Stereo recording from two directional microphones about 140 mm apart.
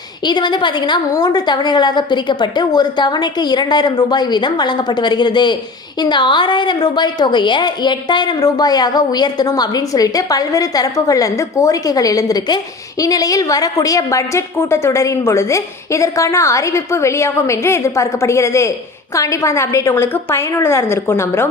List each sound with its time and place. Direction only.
0.3 s a woman's voice: 35° left (ahead or behind); by 21.5 s 15° left (ahead or behind)